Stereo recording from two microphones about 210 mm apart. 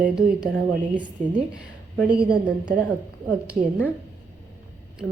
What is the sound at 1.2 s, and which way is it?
Speech, 35° right (ahead or behind).